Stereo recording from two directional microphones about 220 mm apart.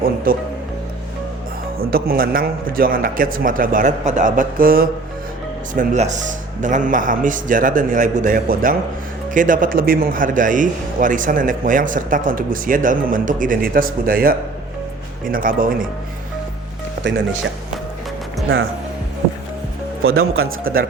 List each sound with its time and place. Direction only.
0.3 s a man's voice: 40° right (ahead or behind)
1.8 s a man's voice: 45° right (ahead or behind)
20.0 s speech: 70° right (ahead or behind)